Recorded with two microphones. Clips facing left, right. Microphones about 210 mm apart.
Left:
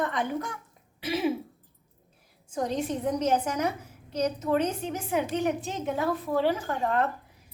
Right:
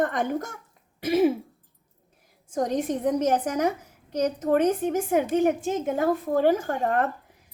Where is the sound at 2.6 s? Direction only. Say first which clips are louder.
Right 4 dB; 45° right (ahead or behind).